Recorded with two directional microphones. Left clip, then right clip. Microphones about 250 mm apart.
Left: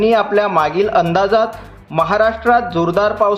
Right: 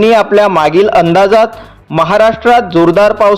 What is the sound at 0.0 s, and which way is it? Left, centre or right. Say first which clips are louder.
A man's voice: right 6 dB; right.